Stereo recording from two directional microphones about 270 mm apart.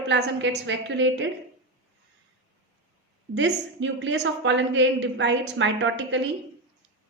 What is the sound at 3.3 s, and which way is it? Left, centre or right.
A woman's voice, right.